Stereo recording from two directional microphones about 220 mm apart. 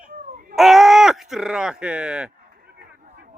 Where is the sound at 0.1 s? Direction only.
40° right (ahead or behind).